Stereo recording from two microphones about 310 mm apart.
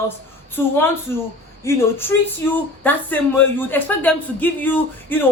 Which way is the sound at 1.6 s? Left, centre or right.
Centre.